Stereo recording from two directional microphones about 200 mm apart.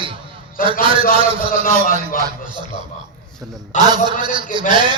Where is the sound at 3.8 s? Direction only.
20° right (ahead or behind).